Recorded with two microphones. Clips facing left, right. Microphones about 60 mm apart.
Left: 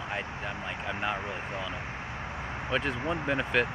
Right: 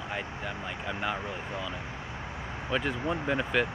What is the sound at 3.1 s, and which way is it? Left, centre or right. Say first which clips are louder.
Speech: even; left.